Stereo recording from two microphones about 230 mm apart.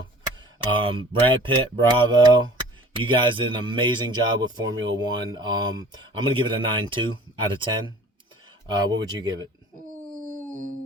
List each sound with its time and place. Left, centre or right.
0.3 s speech: right